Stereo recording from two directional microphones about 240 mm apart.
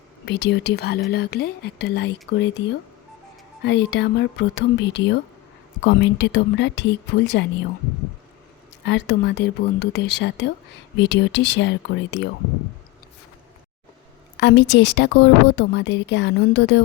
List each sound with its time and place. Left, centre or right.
0.3 s a woman's voice: left
8.8 s a woman's voice: left
14.3 s a woman's voice: left